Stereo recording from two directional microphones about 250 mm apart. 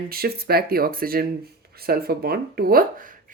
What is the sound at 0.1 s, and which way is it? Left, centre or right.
Speech, right.